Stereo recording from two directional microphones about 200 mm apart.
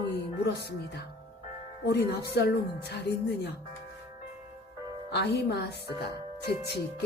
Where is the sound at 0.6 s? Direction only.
55° left (ahead or behind).